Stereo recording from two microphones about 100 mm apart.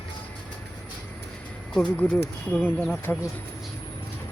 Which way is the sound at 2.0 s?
15° left (ahead or behind).